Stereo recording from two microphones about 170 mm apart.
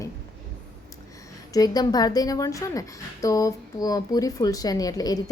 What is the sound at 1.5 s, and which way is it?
Speech, 20° left (ahead or behind).